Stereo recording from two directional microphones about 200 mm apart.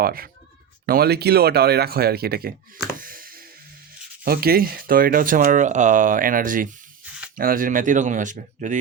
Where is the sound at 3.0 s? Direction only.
45° right (ahead or behind).